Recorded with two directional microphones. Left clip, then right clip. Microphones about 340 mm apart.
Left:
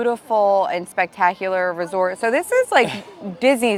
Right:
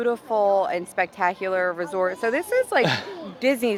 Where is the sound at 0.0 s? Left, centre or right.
Left.